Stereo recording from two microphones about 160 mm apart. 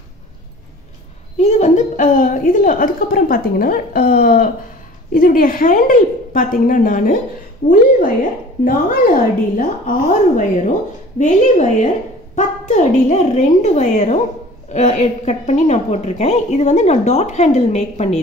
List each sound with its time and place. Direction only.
1.4 s a woman's voice: 45° left (ahead or behind)
7.6 s a woman's voice: 90° left
8.6 s a woman's voice: 60° left (ahead or behind); by 18.2 s 45° left (ahead or behind)